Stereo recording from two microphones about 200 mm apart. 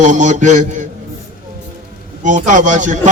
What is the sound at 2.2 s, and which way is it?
Speech, 40° right (ahead or behind).